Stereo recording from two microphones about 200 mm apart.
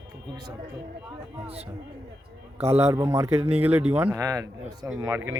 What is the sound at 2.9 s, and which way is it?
Speech, 15° right (ahead or behind).